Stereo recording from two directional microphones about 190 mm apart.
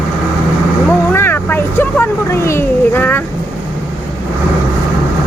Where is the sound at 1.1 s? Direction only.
10° left (ahead or behind).